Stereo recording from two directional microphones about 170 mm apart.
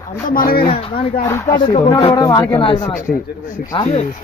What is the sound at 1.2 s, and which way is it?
Speech, 20° left (ahead or behind).